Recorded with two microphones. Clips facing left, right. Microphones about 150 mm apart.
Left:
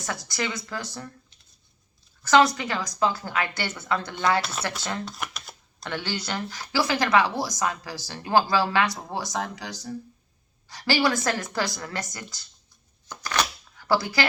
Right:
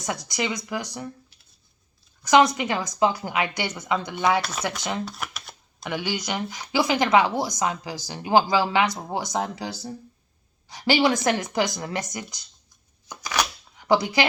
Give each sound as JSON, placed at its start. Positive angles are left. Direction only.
{"t": 0.0, "sound": "a woman's voice", "side_deg": -20}
{"t": 4.1, "sound": "speech", "side_deg": -5}
{"t": 5.8, "sound": "speech", "side_deg": -15}
{"t": 10.7, "sound": "speech", "side_deg": -20}
{"t": 13.1, "sound": "shuffling cards", "side_deg": -10}